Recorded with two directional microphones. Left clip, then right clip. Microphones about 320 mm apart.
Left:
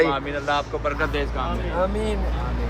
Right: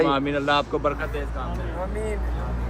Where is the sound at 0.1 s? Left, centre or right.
Right.